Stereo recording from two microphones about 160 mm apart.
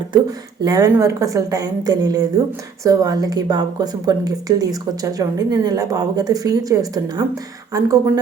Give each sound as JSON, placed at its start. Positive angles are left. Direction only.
{"t": 0.1, "sound": "a woman's voice", "side_deg": -25}